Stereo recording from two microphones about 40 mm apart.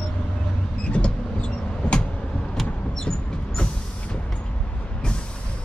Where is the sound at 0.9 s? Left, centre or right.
Left.